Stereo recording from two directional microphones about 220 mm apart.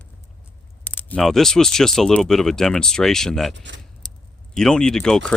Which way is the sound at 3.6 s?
55° right (ahead or behind).